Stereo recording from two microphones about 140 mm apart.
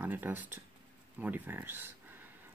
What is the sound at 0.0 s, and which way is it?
Speech, 15° right (ahead or behind).